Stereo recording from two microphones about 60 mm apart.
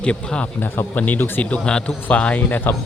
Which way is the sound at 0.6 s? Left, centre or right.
Left.